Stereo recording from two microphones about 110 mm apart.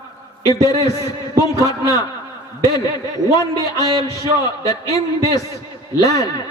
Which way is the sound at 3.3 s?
30° left (ahead or behind).